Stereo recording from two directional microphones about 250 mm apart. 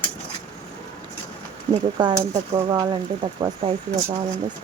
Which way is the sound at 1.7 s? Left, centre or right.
Centre.